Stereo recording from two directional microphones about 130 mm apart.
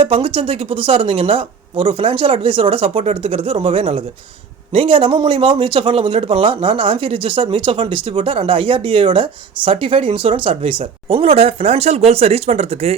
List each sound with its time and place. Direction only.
0.0 s speech: 45° right (ahead or behind)